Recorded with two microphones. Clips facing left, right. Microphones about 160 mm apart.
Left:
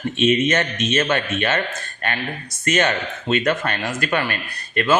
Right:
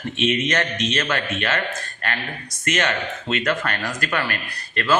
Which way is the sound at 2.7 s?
30° left (ahead or behind).